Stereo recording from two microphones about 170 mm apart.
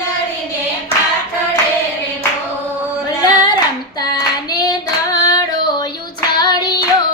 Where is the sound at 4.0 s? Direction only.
25° left (ahead or behind).